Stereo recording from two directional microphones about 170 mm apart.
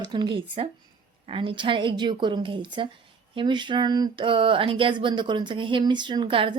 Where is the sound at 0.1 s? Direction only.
25° right (ahead or behind).